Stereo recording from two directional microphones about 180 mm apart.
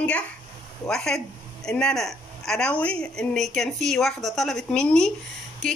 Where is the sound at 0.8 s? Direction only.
Centre (ahead or behind).